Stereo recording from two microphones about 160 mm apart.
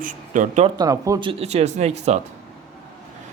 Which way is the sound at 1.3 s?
40° right (ahead or behind).